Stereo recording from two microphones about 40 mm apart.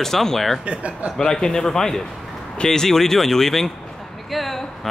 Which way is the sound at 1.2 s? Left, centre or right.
Centre.